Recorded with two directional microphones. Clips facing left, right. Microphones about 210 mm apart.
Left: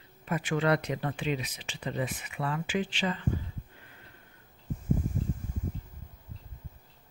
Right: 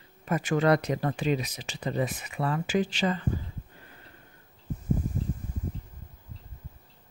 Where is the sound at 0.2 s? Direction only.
45° right (ahead or behind).